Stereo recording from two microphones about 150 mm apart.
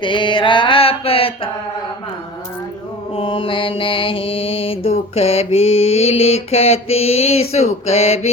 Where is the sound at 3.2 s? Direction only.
35° left (ahead or behind).